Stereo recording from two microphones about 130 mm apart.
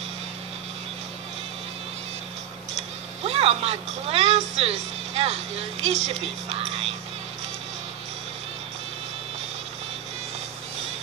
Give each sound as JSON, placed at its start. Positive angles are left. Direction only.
{"t": 3.3, "sound": "speech", "side_deg": -50}